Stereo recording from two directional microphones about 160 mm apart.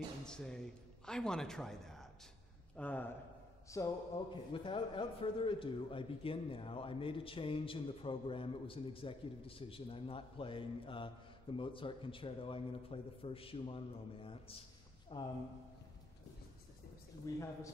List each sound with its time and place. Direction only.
0.3 s a man's voice: 5° left (ahead or behind)
3.7 s a man's voice: 20° left (ahead or behind)
4.5 s a man's voice: 30° left (ahead or behind)
17.3 s a man's voice: 20° left (ahead or behind)